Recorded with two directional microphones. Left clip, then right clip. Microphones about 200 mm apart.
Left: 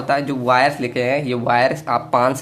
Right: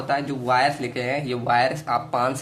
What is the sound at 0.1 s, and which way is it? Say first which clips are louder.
Speech: left 5 dB; 30° left (ahead or behind).